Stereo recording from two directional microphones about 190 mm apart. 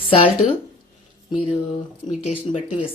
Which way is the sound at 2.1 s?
35° left (ahead or behind).